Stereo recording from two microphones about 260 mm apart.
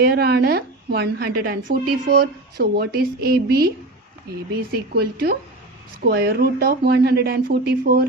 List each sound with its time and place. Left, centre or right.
0.0 s a woman's voice: right
4.7 s a woman's voice: right